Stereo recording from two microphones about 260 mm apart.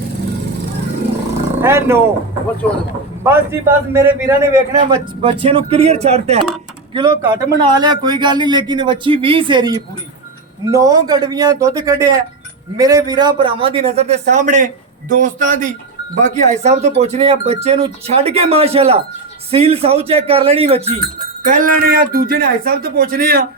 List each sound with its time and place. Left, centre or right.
1.6 s speech: centre
3.2 s speech: centre; by 23.5 s right